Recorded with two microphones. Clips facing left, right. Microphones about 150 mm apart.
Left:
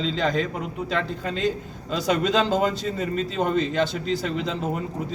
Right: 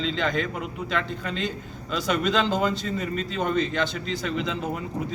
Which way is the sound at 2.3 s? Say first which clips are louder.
Left 1 dB; 45° left (ahead or behind).